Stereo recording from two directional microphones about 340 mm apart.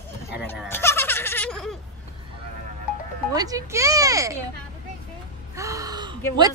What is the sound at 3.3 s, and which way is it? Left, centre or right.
Speech, centre.